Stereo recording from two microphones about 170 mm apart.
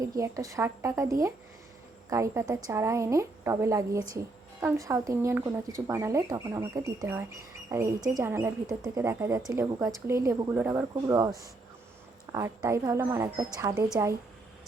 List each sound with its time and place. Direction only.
0.0 s speech: 20° right (ahead or behind)